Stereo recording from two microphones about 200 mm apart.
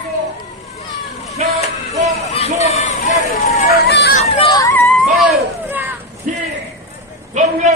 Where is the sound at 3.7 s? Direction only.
55° left (ahead or behind).